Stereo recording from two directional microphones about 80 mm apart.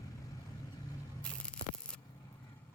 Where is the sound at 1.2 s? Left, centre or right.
Centre.